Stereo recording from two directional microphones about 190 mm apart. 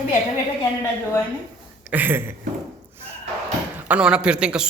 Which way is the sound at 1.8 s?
10° right (ahead or behind).